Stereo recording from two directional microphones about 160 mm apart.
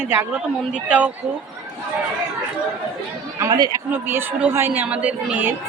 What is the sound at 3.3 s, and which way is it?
A woman's voice, 20° right (ahead or behind).